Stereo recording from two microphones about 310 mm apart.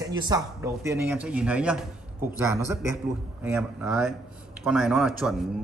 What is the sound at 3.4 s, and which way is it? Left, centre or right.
A man's voice, centre.